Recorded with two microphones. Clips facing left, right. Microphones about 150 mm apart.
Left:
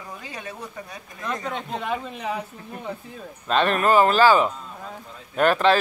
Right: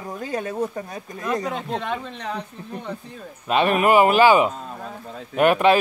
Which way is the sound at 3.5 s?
10° right (ahead or behind).